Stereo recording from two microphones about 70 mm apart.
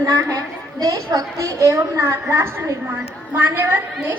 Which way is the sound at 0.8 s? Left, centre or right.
Right.